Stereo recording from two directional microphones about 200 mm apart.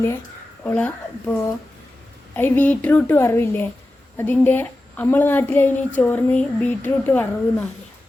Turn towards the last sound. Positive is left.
turn(degrees=10)  # may be behind; listen again after turning